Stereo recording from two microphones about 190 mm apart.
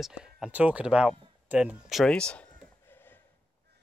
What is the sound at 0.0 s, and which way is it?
Speech, centre (ahead or behind).